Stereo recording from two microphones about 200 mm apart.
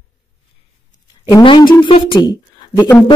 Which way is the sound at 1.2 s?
20° left (ahead or behind).